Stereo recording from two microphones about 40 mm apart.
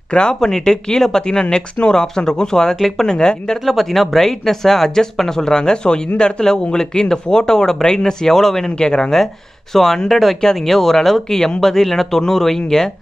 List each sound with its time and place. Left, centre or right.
0.1 s speech: left
2.7 s speech: centre
3.1 s speech: centre
3.6 s speech: centre
8.7 s speech: left
9.1 s speech: centre